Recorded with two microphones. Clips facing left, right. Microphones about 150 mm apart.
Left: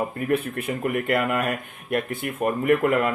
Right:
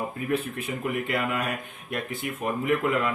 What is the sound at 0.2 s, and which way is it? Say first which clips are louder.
Speech: left 3 dB; 55° left (ahead or behind).